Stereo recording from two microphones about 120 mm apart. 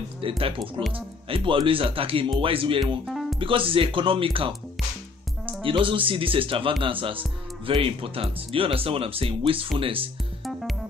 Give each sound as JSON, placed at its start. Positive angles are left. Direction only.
{"t": 0.9, "sound": "speech", "side_deg": -45}
{"t": 3.1, "sound": "music", "side_deg": 0}
{"t": 3.3, "sound": "speech", "side_deg": -45}
{"t": 5.6, "sound": "speech", "side_deg": -45}